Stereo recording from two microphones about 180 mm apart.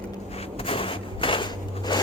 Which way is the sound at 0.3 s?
30° left (ahead or behind).